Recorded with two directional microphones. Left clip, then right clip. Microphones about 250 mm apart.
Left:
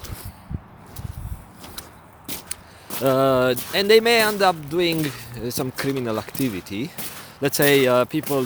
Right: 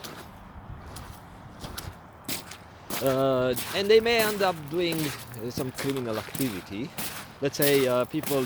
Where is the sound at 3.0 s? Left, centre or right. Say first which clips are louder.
Left 6 dB; left.